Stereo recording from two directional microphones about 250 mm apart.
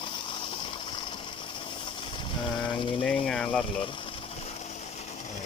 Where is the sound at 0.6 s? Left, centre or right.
Centre.